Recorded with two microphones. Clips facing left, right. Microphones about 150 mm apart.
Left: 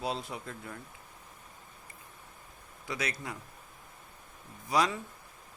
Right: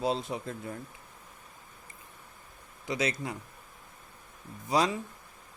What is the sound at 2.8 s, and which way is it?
Speech, 25° right (ahead or behind).